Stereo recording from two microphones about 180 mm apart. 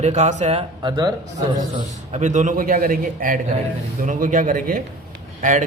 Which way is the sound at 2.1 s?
40° right (ahead or behind).